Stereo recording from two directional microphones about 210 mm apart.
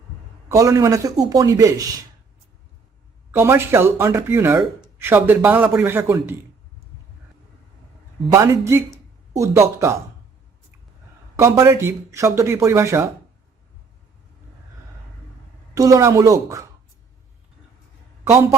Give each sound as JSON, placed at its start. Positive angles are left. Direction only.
{"t": 0.4, "sound": "speech", "side_deg": -15}
{"t": 3.3, "sound": "speech", "side_deg": -10}
{"t": 8.3, "sound": "speech", "side_deg": -15}
{"t": 11.3, "sound": "speech", "side_deg": -15}
{"t": 15.7, "sound": "speech", "side_deg": -15}